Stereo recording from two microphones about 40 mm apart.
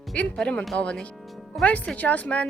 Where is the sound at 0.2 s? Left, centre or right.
Left.